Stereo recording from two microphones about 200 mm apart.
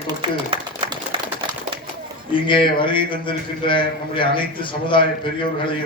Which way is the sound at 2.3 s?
25° left (ahead or behind).